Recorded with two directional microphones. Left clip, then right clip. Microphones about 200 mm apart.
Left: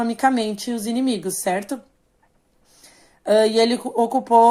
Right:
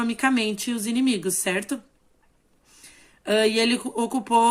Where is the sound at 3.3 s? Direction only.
35° right (ahead or behind).